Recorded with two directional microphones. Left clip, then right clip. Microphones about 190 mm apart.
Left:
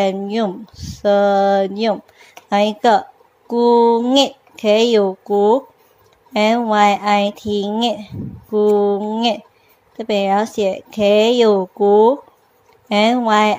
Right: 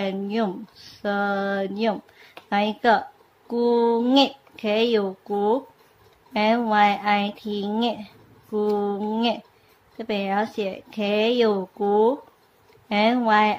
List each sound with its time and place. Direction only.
0.0 s speech: 25° left (ahead or behind)